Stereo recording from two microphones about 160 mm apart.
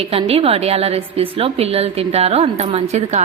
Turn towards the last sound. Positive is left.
turn(degrees=-40)  # may be behind; listen again after turning